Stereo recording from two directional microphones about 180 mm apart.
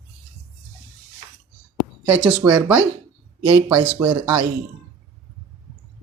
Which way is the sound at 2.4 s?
10° right (ahead or behind).